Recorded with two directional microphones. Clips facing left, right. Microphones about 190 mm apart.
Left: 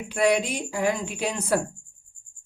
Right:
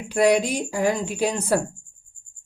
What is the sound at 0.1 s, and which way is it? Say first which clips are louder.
Speech: right 4 dB; 40° right (ahead or behind).